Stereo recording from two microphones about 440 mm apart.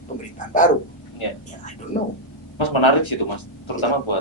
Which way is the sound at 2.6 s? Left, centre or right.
Left.